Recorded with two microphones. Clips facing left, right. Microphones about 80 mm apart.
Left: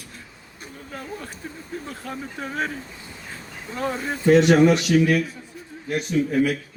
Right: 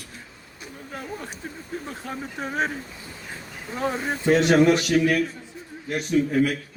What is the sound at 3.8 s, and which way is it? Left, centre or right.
Speech, centre.